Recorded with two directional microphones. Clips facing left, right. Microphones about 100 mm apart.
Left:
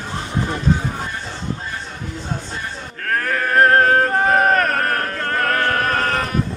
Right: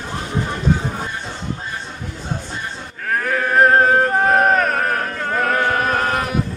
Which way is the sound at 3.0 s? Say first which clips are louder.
Right 1 dB; 5° right (ahead or behind).